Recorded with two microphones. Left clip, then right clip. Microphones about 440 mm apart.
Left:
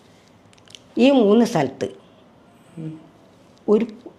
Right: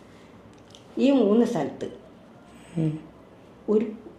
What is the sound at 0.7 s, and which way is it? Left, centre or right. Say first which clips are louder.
Speech: left 6 dB; left.